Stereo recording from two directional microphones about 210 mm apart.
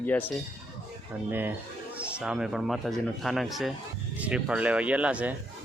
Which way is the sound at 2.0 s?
5° right (ahead or behind).